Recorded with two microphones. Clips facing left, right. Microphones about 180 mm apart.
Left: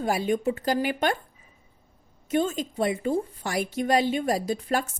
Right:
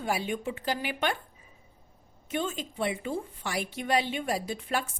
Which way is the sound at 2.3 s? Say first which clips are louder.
Left 7 dB; 40° left (ahead or behind).